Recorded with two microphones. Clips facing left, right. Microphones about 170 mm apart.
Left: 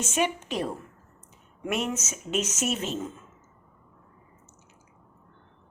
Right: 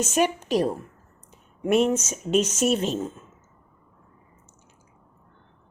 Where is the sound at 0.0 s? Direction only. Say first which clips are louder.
Right 4 dB; 40° right (ahead or behind).